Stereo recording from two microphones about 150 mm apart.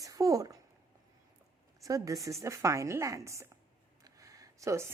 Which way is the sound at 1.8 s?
20° right (ahead or behind).